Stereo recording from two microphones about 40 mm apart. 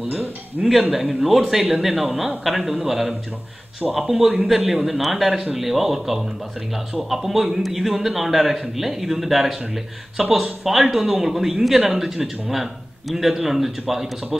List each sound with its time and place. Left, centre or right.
0.6 s a man's voice: centre